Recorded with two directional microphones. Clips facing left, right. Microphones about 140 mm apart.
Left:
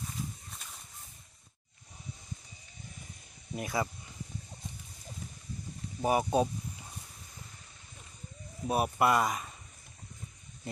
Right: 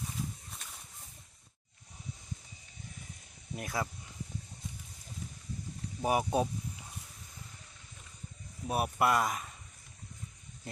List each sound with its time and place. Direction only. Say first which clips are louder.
3.5 s speech: left 3 dB; centre (ahead or behind)
6.0 s speech: left 2 dB; 5° right (ahead or behind)
8.7 s speech: left 2 dB; centre (ahead or behind)